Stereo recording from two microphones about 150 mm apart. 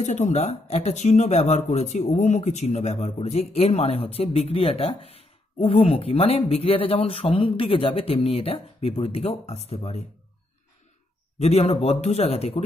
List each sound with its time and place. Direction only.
0.0 s speech: 50° left (ahead or behind)
11.3 s speech: 45° left (ahead or behind)